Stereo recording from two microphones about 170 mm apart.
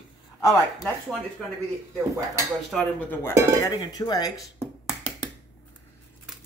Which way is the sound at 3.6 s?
25° left (ahead or behind).